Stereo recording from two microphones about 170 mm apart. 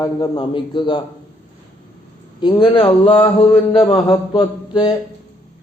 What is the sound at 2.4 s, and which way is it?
Speech, 30° left (ahead or behind).